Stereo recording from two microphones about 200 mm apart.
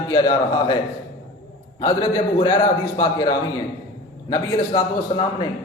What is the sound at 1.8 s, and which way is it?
A man's voice, 20° left (ahead or behind).